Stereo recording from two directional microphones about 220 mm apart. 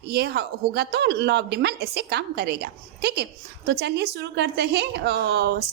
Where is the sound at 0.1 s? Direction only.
45° right (ahead or behind).